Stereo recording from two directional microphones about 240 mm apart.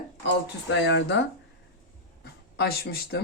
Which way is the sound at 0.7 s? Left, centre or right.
Left.